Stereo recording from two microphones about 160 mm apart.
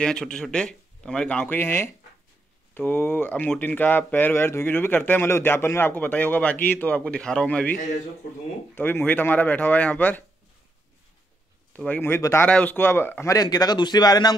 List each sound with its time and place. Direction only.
0.0 s a man's voice: 5° left (ahead or behind)
8.7 s speech: 10° left (ahead or behind)
11.7 s a man's voice: 10° left (ahead or behind); by 14.3 s 25° left (ahead or behind)